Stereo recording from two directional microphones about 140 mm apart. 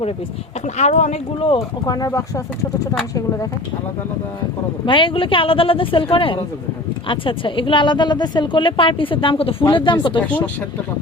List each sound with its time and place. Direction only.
0.8 s speech: 55° left (ahead or behind)
1.4 s a woman's voice: 40° left (ahead or behind)
1.8 s speech: 25° left (ahead or behind)
4.9 s a woman's voice: 35° left (ahead or behind)
10.2 s speech: 10° left (ahead or behind)